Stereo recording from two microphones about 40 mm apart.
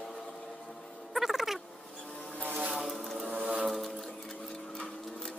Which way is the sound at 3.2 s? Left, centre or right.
Right.